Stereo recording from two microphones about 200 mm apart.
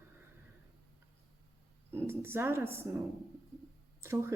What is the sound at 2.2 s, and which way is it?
A woman's voice, 10° right (ahead or behind).